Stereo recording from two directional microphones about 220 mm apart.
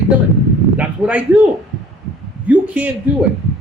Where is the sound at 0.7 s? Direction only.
5° right (ahead or behind).